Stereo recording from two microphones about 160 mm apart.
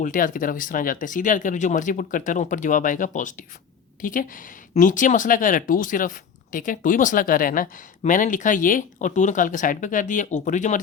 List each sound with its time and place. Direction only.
0.0 s speech: 60° left (ahead or behind)